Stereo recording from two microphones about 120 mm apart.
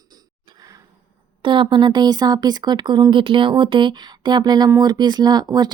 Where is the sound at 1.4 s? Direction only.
45° right (ahead or behind).